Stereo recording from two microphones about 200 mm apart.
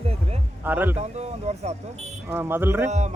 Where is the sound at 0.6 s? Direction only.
10° right (ahead or behind).